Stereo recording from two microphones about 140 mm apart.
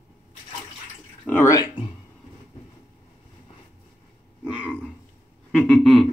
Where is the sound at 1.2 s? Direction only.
20° left (ahead or behind).